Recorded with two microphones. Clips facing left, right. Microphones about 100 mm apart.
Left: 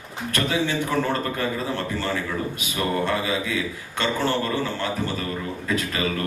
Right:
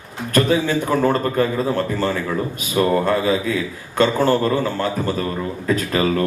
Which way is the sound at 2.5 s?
40° right (ahead or behind).